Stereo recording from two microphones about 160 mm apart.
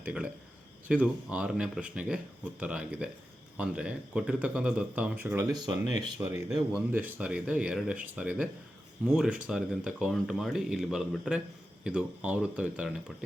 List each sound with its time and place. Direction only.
0.0 s speech: 10° right (ahead or behind)
5.5 s speech: 25° right (ahead or behind)
6.1 s speech: 15° right (ahead or behind)